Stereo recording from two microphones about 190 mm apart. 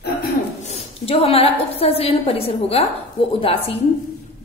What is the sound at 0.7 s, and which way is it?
A woman's voice, 35° left (ahead or behind).